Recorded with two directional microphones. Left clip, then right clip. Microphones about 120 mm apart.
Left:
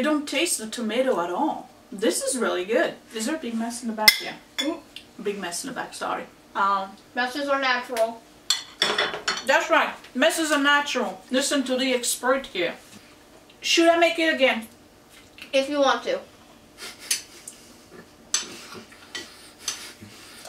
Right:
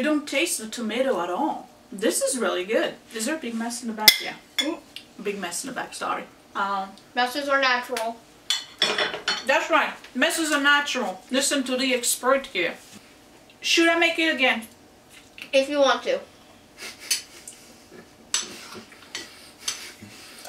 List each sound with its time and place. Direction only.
0.0 s a woman's voice: centre (ahead or behind)
5.2 s a woman's voice: 5° right (ahead or behind)
7.2 s a woman's voice: 20° right (ahead or behind)
8.5 s dishes: 10° left (ahead or behind)
9.7 s a woman's voice: centre (ahead or behind)